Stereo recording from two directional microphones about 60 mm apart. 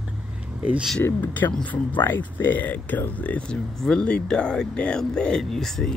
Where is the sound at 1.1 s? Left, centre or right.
Left.